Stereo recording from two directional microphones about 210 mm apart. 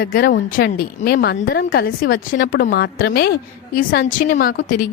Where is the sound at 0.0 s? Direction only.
45° left (ahead or behind).